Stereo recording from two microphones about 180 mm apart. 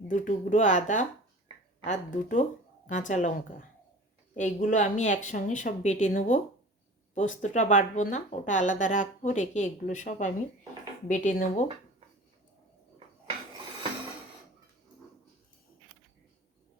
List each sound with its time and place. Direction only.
0.1 s speech: 45° left (ahead or behind)